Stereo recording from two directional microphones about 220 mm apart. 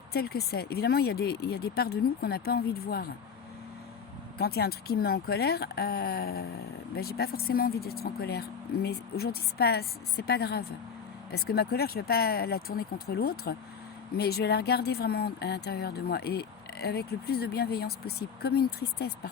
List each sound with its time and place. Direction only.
0.1 s speech: 45° left (ahead or behind)
4.4 s speech: 45° left (ahead or behind)